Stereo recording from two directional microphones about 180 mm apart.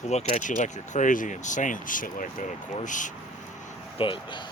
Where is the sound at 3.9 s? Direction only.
25° left (ahead or behind).